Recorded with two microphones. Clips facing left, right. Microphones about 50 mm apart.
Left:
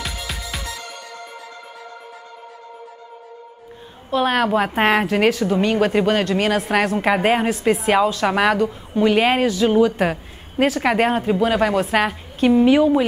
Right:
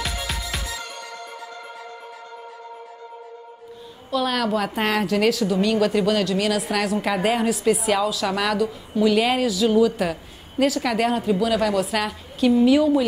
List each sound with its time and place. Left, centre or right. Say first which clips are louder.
0.0 s music: right 1 dB; centre
4.1 s a woman's voice: left 4 dB; left